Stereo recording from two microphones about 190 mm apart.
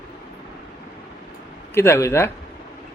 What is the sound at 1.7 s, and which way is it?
Speech, 15° left (ahead or behind).